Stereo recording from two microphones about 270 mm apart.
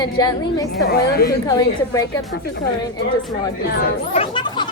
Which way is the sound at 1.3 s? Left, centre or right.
Centre.